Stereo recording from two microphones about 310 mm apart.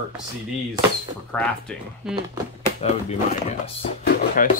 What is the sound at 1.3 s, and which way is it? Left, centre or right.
Speech, centre.